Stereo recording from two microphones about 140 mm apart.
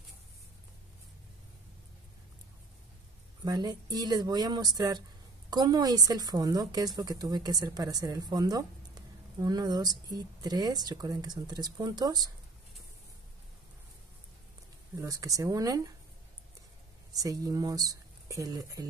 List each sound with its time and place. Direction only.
3.4 s a woman's voice: 25° right (ahead or behind)
15.0 s a woman's voice: 25° right (ahead or behind)
17.2 s a woman's voice: 25° right (ahead or behind)